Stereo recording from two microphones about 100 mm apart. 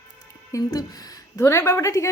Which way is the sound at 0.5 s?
35° left (ahead or behind).